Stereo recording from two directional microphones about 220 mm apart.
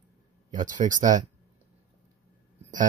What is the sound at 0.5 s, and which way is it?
Speech, 35° right (ahead or behind).